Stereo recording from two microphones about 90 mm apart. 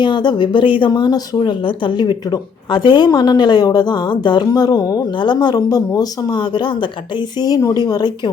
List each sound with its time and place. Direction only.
0.0 s speech: 55° left (ahead or behind)
0.9 s speech: 50° left (ahead or behind)
5.1 s speech: 55° left (ahead or behind); by 6.3 s 40° left (ahead or behind)
6.3 s speech: 55° left (ahead or behind)